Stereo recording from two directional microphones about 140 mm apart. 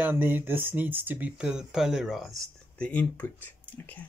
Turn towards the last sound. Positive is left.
turn(degrees=10)  # may be behind; listen again after turning